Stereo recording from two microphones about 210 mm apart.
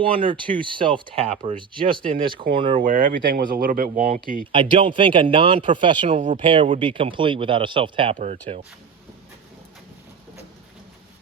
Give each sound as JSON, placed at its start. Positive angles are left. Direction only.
{"t": 0.0, "sound": "a man's voice", "side_deg": -25}
{"t": 2.8, "sound": "speech", "side_deg": -40}
{"t": 4.5, "sound": "a man's voice", "side_deg": -25}